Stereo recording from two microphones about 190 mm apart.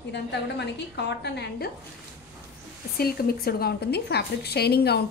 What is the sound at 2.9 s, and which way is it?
Speech, 55° left (ahead or behind).